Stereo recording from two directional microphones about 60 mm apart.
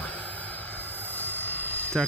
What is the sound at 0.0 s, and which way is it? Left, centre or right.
Vehicle, left.